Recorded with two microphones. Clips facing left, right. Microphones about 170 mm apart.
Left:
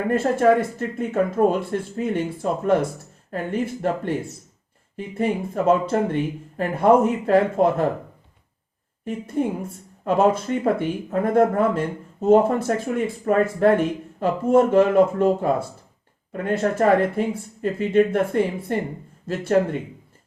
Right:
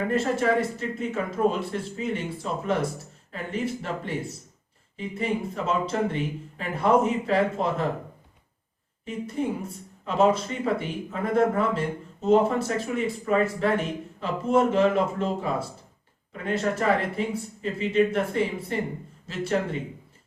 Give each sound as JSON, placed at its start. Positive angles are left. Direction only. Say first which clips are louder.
{"t": 0.1, "sound": "speech", "louder": "left 8 dB", "side_deg": 55}
{"t": 9.4, "sound": "speech", "louder": "left 5 dB", "side_deg": 50}